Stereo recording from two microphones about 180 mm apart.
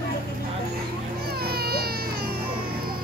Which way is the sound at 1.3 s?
60° right (ahead or behind).